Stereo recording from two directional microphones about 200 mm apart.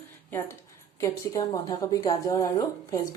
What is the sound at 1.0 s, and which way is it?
Speech, 15° left (ahead or behind).